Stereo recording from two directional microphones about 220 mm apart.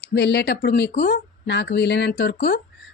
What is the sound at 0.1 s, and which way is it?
Speech, 50° left (ahead or behind).